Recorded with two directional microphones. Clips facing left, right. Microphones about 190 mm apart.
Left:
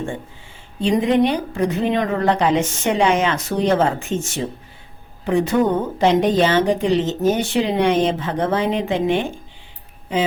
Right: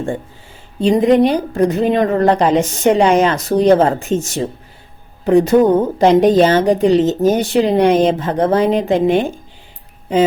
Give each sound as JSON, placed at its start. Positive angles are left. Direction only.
{"t": 0.8, "sound": "a woman's voice", "side_deg": -40}